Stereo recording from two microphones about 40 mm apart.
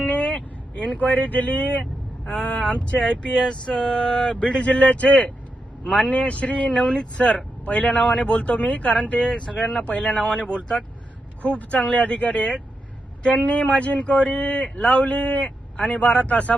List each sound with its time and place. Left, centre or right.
0.1 s vehicle: left
0.9 s speech: left
3.2 s a sound: centre
3.8 s speech: left
4.6 s speech: left
6.7 s a sound: centre
7.2 s speech: left
9.7 s speech: left
10.3 s speech: left